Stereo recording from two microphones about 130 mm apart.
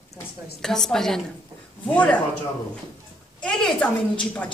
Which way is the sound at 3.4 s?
5° left (ahead or behind).